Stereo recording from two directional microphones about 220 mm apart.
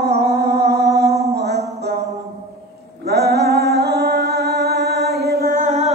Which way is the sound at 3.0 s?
45° right (ahead or behind).